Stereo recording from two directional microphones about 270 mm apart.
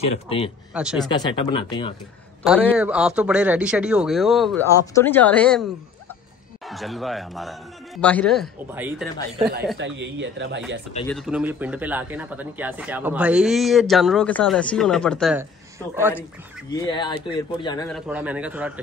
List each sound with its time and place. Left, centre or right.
0.7 s speech: centre
1.0 s speech: centre
2.4 s speech: centre
4.6 s speech: centre
9.8 s speech: right
11.1 s speech: centre
16.7 s speech: centre
17.8 s speech: centre